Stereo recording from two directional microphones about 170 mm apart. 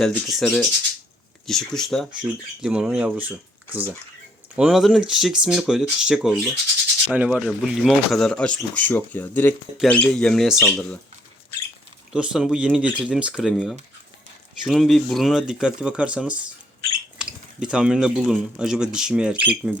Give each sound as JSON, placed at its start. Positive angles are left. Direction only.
{"t": 0.0, "sound": "speech", "side_deg": 0}
{"t": 12.1, "sound": "speech", "side_deg": -5}